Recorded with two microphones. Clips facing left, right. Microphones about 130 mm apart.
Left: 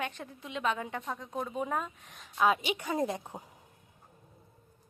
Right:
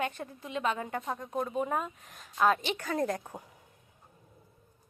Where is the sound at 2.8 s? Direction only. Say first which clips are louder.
Even; 20° left (ahead or behind).